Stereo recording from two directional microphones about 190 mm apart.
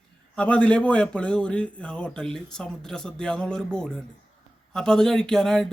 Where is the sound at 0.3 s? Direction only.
5° left (ahead or behind).